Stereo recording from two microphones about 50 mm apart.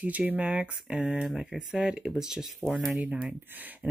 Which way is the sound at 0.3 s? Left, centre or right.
Right.